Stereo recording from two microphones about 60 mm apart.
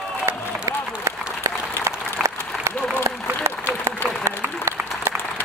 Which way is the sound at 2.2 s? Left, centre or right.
Right.